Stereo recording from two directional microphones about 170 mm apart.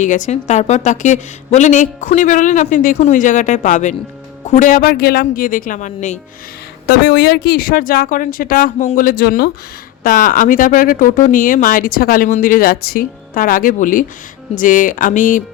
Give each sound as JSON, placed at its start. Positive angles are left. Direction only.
{"t": 0.0, "sound": "speech", "side_deg": 45}
{"t": 6.8, "sound": "speech", "side_deg": 70}
{"t": 10.0, "sound": "speech", "side_deg": 50}